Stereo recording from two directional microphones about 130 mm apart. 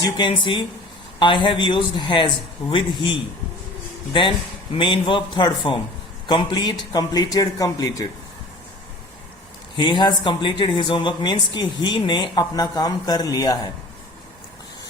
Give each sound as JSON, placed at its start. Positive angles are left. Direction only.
{"t": 0.0, "sound": "a man's voice", "side_deg": 40}
{"t": 9.7, "sound": "speech", "side_deg": 35}